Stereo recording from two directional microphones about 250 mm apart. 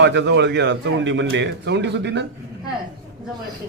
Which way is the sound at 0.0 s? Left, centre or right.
Right.